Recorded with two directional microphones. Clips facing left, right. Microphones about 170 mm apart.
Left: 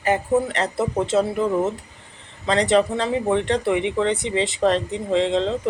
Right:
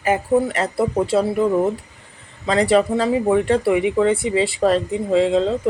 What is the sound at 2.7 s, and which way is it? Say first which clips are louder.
Speech: right 3 dB; 5° right (ahead or behind).